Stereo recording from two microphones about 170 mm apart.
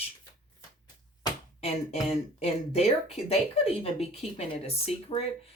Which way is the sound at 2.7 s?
35° left (ahead or behind).